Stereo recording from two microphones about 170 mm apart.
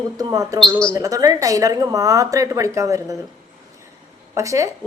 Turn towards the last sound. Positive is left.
turn(degrees=-20)  # may be behind; listen again after turning